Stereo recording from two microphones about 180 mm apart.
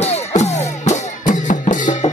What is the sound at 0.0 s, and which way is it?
Music, 40° left (ahead or behind).